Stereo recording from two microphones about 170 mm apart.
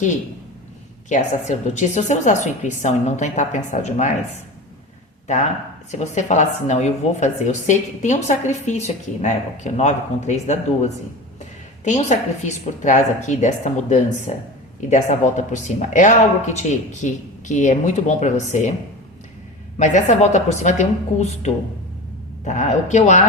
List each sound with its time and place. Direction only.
1.1 s speech: 45° left (ahead or behind)
5.9 s speech: 45° left (ahead or behind)
19.8 s speech: 45° left (ahead or behind)